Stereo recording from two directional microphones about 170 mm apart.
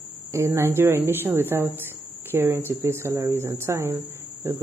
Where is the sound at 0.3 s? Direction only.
15° right (ahead or behind).